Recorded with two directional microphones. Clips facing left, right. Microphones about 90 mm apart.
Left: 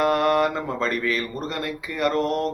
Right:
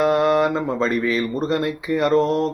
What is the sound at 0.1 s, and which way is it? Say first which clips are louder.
Mantra: right 3 dB; 20° right (ahead or behind).